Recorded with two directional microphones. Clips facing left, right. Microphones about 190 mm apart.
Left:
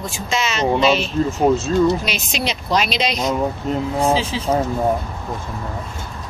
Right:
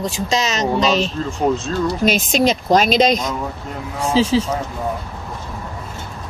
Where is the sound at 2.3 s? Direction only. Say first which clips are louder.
Right 4 dB; 45° right (ahead or behind).